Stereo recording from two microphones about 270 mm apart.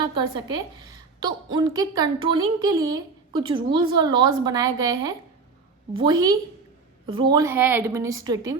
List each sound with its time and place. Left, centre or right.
0.0 s a woman's voice: centre